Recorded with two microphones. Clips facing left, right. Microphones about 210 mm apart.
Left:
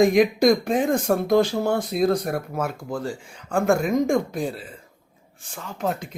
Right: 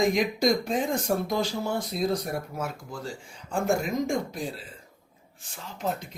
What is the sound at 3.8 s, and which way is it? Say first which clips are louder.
Speech: left 7 dB; 55° left (ahead or behind).